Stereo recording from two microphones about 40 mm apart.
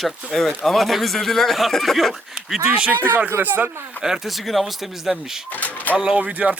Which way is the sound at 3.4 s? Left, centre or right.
Right.